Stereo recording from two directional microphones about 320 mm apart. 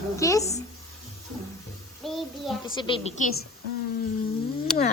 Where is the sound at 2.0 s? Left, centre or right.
Centre.